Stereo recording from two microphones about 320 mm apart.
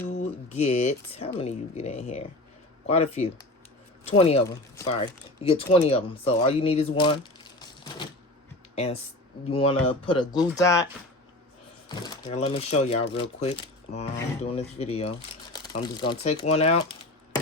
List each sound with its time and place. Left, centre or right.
0.2 s speech: centre
8.7 s speech: centre
11.9 s speech: centre